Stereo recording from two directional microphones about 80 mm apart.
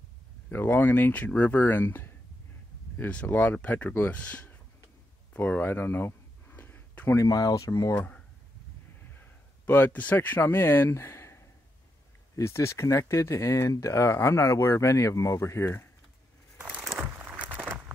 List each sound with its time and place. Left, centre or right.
0.5 s speech: left
5.3 s a sound: left
7.2 s speech: left
7.9 s speech: left
9.2 s speech: left
16.8 s a sound: right